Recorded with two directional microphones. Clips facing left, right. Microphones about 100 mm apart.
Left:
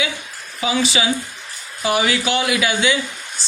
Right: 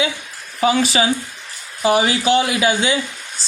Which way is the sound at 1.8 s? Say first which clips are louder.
Right 3 dB; 30° right (ahead or behind).